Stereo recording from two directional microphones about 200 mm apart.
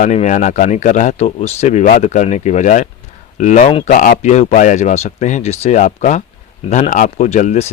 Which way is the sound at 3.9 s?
40° left (ahead or behind).